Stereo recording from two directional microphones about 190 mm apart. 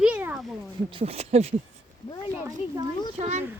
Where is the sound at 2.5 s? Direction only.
20° right (ahead or behind).